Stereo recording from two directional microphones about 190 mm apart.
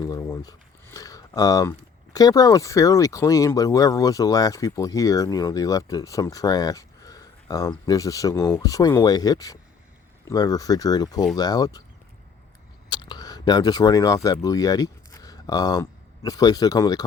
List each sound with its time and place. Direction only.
0.0 s speech: 20° left (ahead or behind)
12.9 s speech: 25° left (ahead or behind)